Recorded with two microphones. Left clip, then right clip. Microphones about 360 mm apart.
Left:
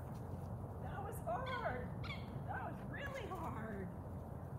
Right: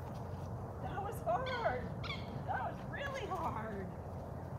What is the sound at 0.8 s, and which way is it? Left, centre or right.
Owl, centre.